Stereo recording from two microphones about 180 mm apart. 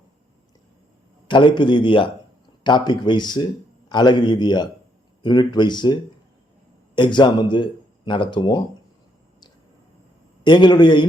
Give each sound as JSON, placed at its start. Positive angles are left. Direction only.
{"t": 1.3, "sound": "a man's voice", "side_deg": 25}
{"t": 10.4, "sound": "a man's voice", "side_deg": 25}